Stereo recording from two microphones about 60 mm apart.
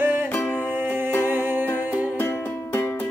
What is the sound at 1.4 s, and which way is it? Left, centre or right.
Music, right.